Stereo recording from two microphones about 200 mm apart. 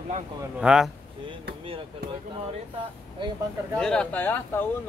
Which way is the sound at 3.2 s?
25° right (ahead or behind).